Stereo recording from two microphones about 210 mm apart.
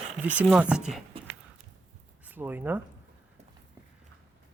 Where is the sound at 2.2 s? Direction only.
10° right (ahead or behind).